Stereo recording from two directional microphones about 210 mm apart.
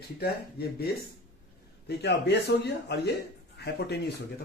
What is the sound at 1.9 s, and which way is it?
Speech, 55° left (ahead or behind).